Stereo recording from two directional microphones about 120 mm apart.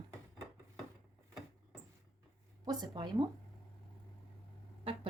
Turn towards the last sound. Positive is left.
turn(degrees=-50)  # may be behind; listen again after turning